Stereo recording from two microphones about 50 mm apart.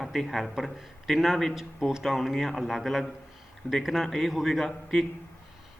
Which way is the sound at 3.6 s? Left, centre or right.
Left.